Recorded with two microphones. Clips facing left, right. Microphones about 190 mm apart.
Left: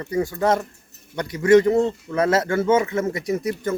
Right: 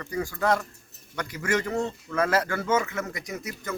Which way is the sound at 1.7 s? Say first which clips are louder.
Left 10 dB; 25° left (ahead or behind).